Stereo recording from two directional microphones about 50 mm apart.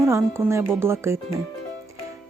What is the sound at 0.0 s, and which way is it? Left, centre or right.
Speech, right.